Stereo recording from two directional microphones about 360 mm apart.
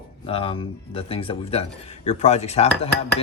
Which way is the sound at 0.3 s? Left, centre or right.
Centre.